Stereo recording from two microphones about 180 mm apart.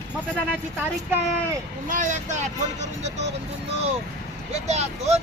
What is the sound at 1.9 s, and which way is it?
Speech, 45° right (ahead or behind).